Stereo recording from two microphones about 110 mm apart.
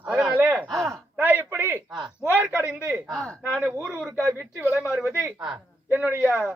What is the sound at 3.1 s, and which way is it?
Speech, 5° left (ahead or behind).